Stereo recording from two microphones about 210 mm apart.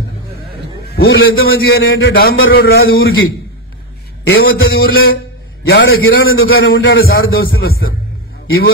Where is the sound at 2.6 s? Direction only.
50° left (ahead or behind).